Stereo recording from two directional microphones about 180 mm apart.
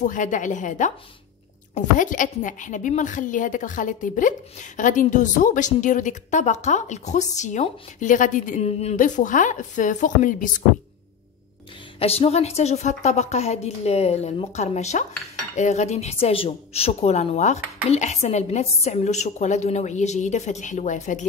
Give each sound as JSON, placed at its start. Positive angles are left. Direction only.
{"t": 0.0, "sound": "a woman's voice", "side_deg": 45}
{"t": 12.0, "sound": "a woman's voice", "side_deg": 35}